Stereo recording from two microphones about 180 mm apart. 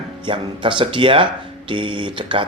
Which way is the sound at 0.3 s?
30° right (ahead or behind).